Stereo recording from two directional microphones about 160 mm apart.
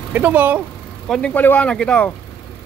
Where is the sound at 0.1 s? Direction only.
10° right (ahead or behind).